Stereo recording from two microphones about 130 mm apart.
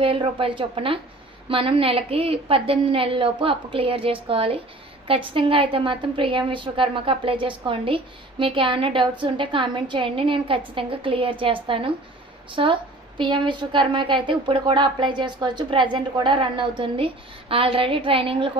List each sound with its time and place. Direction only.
0.0 s a woman's voice: 45° right (ahead or behind)